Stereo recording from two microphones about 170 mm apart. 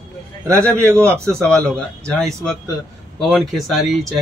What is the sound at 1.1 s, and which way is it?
A man's voice, 5° left (ahead or behind).